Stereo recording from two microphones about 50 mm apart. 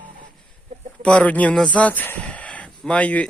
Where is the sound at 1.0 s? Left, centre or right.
Left.